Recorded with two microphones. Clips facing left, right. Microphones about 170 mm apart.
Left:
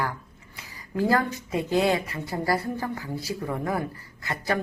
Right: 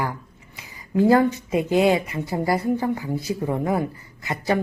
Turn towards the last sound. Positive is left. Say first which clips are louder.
# right 4 dB
turn(degrees=-20)  # may be behind; listen again after turning